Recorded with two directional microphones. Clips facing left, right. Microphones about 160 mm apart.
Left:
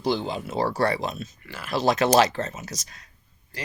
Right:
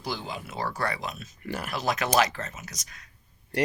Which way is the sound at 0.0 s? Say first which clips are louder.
Left 9 dB; 25° left (ahead or behind).